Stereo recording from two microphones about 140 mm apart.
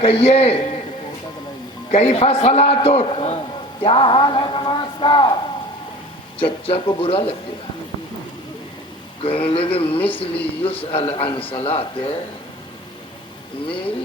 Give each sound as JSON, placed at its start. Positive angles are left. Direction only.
{"t": 0.0, "sound": "a man's voice", "side_deg": 45}
{"t": 1.9, "sound": "a man's voice", "side_deg": 45}
{"t": 6.4, "sound": "a man's voice", "side_deg": 40}
{"t": 9.2, "sound": "a man's voice", "side_deg": 40}